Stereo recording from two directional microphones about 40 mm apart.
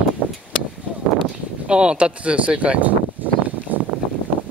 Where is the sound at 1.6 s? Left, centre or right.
Right.